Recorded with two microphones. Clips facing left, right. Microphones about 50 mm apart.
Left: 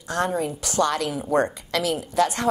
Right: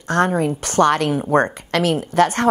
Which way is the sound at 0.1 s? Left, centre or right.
Right.